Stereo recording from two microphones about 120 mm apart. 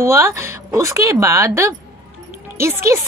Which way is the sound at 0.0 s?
25° right (ahead or behind).